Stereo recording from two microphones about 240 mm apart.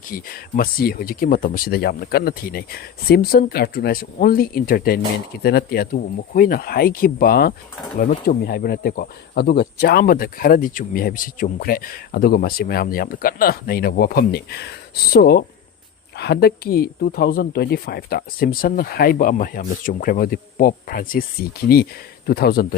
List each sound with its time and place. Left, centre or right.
0.1 s speech: left
22.3 s speech: left